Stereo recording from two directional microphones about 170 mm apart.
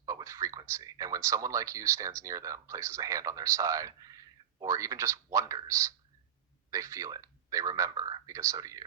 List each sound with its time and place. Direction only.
0.0 s speech: 20° right (ahead or behind)